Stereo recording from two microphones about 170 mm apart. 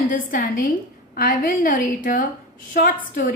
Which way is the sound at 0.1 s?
50° left (ahead or behind).